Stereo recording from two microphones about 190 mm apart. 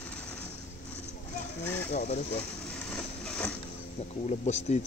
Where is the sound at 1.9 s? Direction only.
35° left (ahead or behind).